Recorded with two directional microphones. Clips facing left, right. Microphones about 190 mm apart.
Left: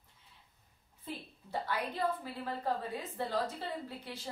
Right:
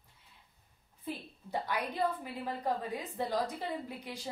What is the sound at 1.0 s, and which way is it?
A woman's voice, 15° right (ahead or behind).